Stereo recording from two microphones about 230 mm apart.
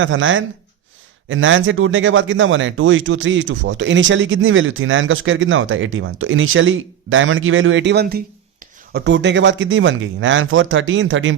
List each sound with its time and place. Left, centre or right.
0.0 s speech: right